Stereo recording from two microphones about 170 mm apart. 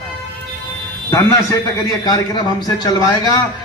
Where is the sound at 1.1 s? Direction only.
20° left (ahead or behind).